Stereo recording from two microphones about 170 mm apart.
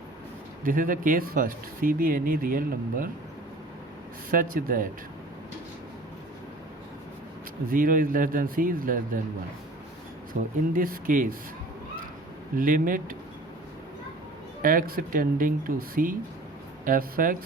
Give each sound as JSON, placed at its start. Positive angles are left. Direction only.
{"t": 0.6, "sound": "speech", "side_deg": -55}
{"t": 4.3, "sound": "speech", "side_deg": -55}
{"t": 7.7, "sound": "speech", "side_deg": -55}
{"t": 10.8, "sound": "speech", "side_deg": -55}
{"t": 12.5, "sound": "speech", "side_deg": -55}
{"t": 14.6, "sound": "speech", "side_deg": -55}